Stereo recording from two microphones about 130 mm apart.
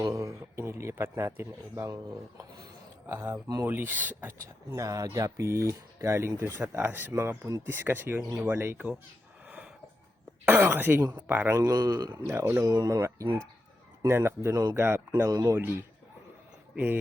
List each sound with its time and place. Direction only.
0.1 s speech: 25° right (ahead or behind)
10.4 s speech: 15° right (ahead or behind); by 12.4 s 30° right (ahead or behind)
12.4 s speech: 15° right (ahead or behind)
12.7 s speech: 30° right (ahead or behind)
14.8 s speech: 20° right (ahead or behind)
15.1 s speech: 30° right (ahead or behind)
16.7 s speech: 15° right (ahead or behind)